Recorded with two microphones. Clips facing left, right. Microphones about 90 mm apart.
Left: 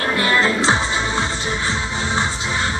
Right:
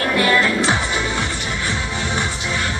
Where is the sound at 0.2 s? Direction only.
25° left (ahead or behind).